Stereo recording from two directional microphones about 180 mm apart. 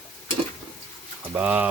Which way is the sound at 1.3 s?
10° right (ahead or behind).